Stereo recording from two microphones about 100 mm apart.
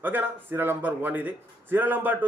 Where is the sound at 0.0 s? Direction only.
20° right (ahead or behind).